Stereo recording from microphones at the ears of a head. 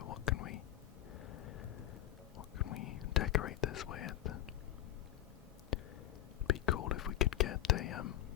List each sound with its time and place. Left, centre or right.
0.0 s whispering: left
1.2 s a sound: left
2.4 s whispering: left
6.5 s whispering: left